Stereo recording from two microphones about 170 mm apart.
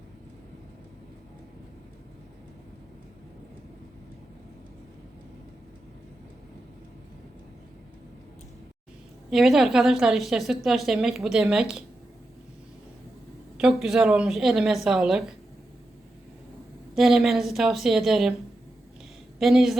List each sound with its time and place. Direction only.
9.3 s a woman's voice: centre (ahead or behind)
13.6 s a woman's voice: centre (ahead or behind)
16.9 s a woman's voice: centre (ahead or behind)
19.4 s a woman's voice: centre (ahead or behind)